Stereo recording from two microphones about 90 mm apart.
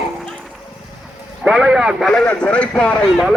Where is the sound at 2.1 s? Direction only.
15° left (ahead or behind).